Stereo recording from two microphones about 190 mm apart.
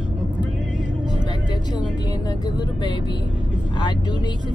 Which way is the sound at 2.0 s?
20° left (ahead or behind).